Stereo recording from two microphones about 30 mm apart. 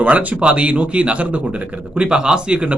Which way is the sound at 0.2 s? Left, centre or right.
Right.